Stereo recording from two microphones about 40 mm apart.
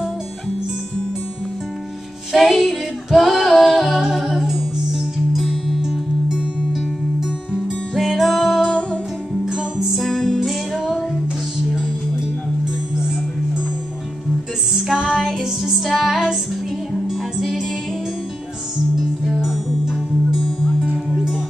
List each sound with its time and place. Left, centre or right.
2.3 s female singing: centre
4.1 s music: centre
7.9 s music: centre
8.6 s music: left
10.0 s music: centre
10.4 s music: centre
14.7 s music: centre
15.1 s music: centre